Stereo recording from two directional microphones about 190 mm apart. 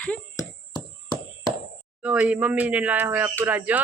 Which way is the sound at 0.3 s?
25° left (ahead or behind).